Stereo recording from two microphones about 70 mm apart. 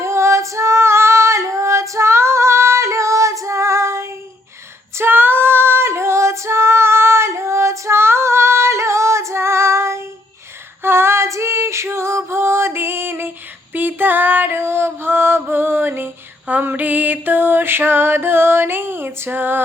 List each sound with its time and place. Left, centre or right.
0.0 s female singing: right
13.7 s music: right